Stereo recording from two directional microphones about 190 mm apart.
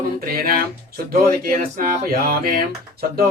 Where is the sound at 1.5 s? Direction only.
50° right (ahead or behind).